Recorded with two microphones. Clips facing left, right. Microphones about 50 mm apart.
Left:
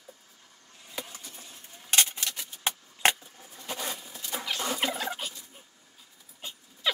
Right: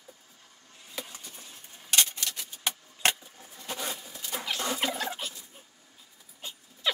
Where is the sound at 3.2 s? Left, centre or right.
Centre.